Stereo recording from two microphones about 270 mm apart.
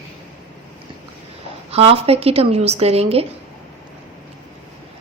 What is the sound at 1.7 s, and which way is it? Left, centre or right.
A woman's voice, right.